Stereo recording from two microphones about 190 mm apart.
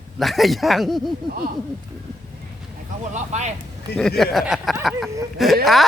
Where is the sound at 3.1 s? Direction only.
35° right (ahead or behind).